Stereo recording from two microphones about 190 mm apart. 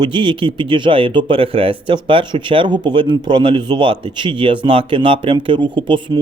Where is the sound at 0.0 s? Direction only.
25° right (ahead or behind).